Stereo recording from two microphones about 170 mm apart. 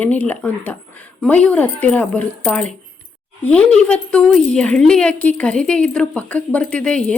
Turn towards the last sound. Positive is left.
turn(degrees=5)  # may be behind; listen again after turning